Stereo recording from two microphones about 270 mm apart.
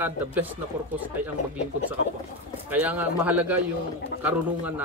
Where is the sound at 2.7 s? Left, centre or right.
Centre.